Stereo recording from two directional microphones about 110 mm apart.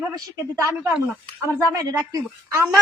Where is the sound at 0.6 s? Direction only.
25° right (ahead or behind).